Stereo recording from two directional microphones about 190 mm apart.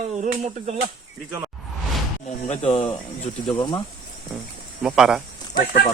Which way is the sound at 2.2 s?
35° left (ahead or behind).